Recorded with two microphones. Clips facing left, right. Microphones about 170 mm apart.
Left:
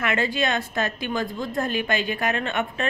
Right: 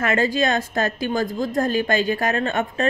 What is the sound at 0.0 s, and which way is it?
A woman's voice, 40° right (ahead or behind).